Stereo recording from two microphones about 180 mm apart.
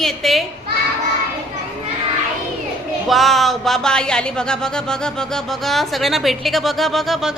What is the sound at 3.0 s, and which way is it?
Speech, centre (ahead or behind).